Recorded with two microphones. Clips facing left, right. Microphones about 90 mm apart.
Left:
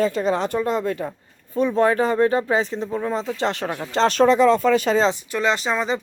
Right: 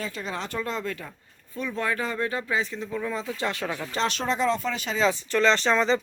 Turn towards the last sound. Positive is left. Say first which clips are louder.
# even
turn(degrees=10)  # may be behind; listen again after turning